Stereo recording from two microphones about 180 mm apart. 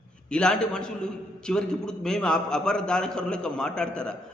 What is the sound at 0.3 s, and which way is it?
A man's voice, 5° left (ahead or behind).